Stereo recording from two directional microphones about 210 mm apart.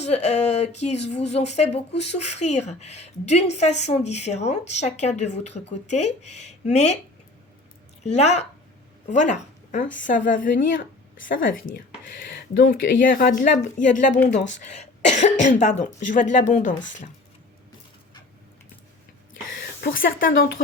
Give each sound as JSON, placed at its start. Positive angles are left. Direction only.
{"t": 0.0, "sound": "speech", "side_deg": 30}
{"t": 8.0, "sound": "speech", "side_deg": 30}
{"t": 19.8, "sound": "speech", "side_deg": 45}